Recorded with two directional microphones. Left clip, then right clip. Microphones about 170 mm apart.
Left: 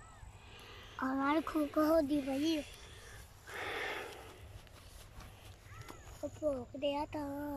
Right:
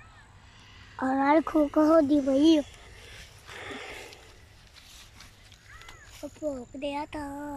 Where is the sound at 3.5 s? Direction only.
Centre (ahead or behind).